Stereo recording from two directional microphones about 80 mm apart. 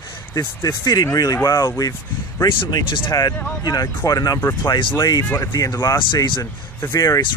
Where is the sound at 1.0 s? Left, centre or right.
Left.